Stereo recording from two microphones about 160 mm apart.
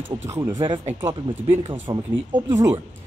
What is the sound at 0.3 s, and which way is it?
Speech, 15° right (ahead or behind).